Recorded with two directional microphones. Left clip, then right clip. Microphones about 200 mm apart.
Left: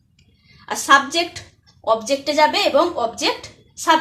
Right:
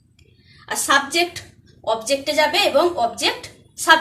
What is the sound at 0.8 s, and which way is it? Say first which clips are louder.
A woman's voice: left 3 dB; 40° left (ahead or behind).